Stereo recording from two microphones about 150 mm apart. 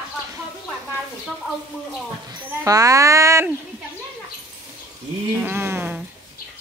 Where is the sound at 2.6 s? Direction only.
20° right (ahead or behind).